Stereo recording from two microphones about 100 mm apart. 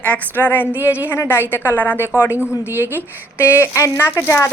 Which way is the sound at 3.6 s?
25° left (ahead or behind).